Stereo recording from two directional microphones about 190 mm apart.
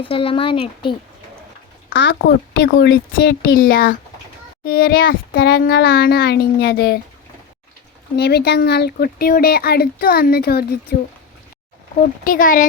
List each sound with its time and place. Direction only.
0.0 s speech: 30° left (ahead or behind)
1.9 s speech: 70° left (ahead or behind)
8.1 s speech: 60° left (ahead or behind)
11.9 s speech: 45° left (ahead or behind)